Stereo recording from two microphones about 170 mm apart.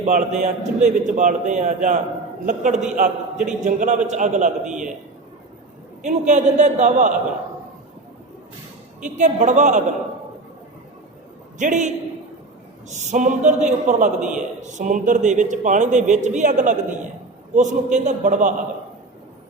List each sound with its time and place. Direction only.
0.0 s a man's voice: 45° right (ahead or behind)
6.0 s a man's voice: 45° right (ahead or behind)
9.0 s a man's voice: 45° right (ahead or behind)
11.5 s a man's voice: 45° right (ahead or behind)